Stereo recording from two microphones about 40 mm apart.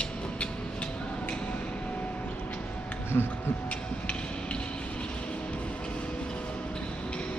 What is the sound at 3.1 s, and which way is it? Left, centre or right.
Speech, left.